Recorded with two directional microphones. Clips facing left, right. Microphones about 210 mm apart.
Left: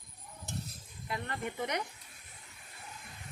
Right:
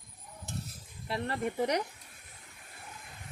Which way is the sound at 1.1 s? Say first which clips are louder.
Right 5 dB; 35° right (ahead or behind).